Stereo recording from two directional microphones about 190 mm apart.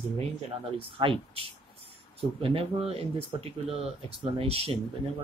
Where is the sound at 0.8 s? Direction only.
30° right (ahead or behind).